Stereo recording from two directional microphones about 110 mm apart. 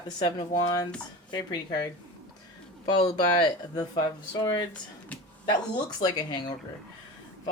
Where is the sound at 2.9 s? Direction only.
45° left (ahead or behind).